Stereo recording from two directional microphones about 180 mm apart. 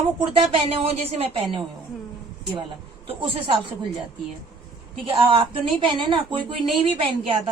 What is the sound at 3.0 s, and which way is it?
Speech, 30° right (ahead or behind).